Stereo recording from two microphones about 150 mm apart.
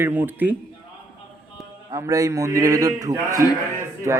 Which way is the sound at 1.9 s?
20° right (ahead or behind).